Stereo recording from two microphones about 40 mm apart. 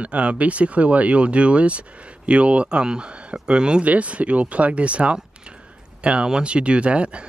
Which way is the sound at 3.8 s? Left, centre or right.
Right.